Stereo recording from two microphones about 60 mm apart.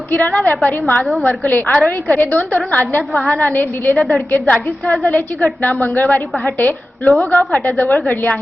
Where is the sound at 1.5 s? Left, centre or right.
Left.